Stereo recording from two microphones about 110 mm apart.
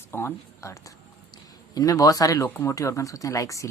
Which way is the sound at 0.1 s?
20° left (ahead or behind).